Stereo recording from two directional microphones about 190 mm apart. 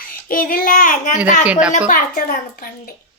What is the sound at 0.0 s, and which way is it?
A child's voice, 50° left (ahead or behind).